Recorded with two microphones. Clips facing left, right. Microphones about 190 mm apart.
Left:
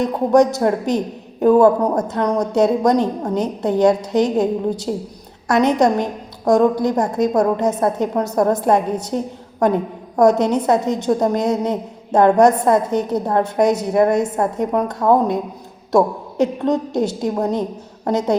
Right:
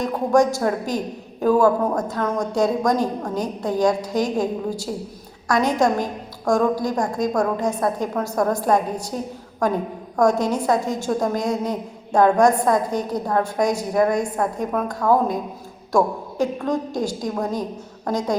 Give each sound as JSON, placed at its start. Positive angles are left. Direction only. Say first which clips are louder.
{"t": 0.0, "sound": "a woman's voice", "louder": "left 4 dB", "side_deg": 20}
{"t": 10.2, "sound": "a woman's voice", "louder": "left 5 dB", "side_deg": 20}